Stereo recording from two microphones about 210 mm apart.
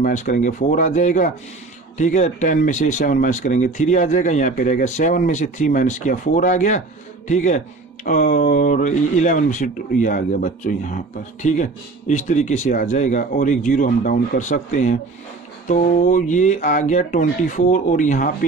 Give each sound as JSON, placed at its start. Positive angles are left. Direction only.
{"t": 0.0, "sound": "speech", "side_deg": 40}